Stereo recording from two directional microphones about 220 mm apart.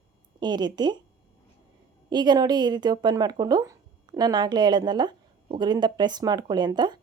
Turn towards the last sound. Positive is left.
turn(degrees=-20)  # may be behind; listen again after turning